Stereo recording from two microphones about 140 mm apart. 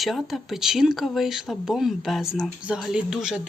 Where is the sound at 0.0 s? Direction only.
Centre (ahead or behind).